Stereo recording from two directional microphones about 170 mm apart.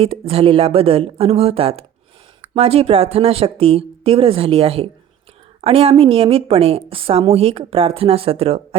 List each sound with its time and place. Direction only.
0.0 s a woman's voice: 35° right (ahead or behind)